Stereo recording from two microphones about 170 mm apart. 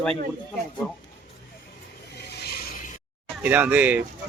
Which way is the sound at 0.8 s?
15° left (ahead or behind).